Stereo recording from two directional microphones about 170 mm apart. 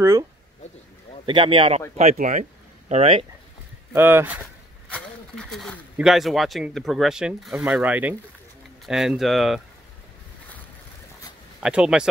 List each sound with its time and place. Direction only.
0.0 s speech: 15° right (ahead or behind)
1.2 s speech: 30° right (ahead or behind)
2.1 s speech: 50° right (ahead or behind)
2.9 s speech: 35° right (ahead or behind)
3.9 s speech: 15° right (ahead or behind)
4.9 s speech: 5° left (ahead or behind)
11.6 s speech: 5° right (ahead or behind)